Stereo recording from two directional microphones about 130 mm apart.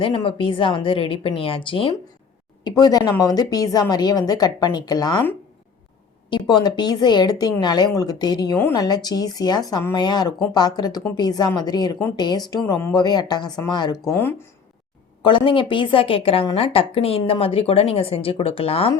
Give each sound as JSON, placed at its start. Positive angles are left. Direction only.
{"t": 0.2, "sound": "a woman's voice", "side_deg": 40}
{"t": 2.6, "sound": "a woman's voice", "side_deg": 30}
{"t": 6.3, "sound": "a woman's voice", "side_deg": 35}
{"t": 14.1, "sound": "speech", "side_deg": 15}
{"t": 15.2, "sound": "a woman's voice", "side_deg": 40}